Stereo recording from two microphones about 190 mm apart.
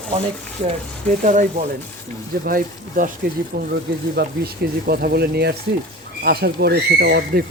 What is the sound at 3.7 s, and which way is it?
Speech, 55° right (ahead or behind).